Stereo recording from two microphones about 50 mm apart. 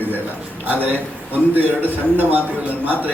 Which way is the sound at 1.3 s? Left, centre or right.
Right.